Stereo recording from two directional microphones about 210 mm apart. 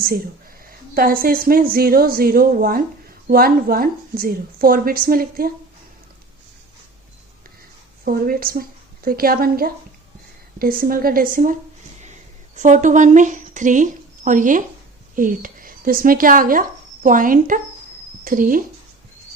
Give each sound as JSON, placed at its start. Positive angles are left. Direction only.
{"t": 0.7, "sound": "speech", "side_deg": -45}
{"t": 8.0, "sound": "speech", "side_deg": -45}
{"t": 12.5, "sound": "a woman's voice", "side_deg": -35}